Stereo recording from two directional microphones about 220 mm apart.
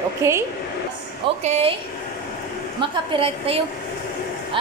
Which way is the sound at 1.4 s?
30° right (ahead or behind).